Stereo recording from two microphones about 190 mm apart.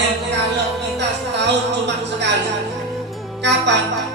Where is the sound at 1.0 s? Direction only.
65° right (ahead or behind).